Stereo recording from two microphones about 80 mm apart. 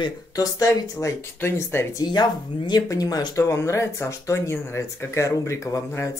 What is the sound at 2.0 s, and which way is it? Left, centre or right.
Speech, left.